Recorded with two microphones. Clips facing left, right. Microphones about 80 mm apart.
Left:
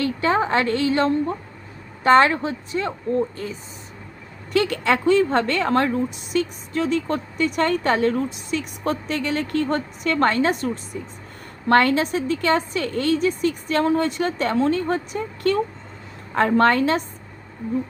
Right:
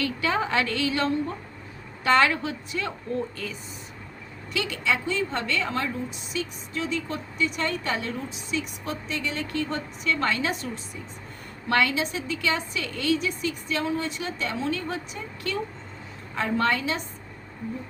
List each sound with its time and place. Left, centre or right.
0.0 s a woman's voice: left
4.5 s a woman's voice: left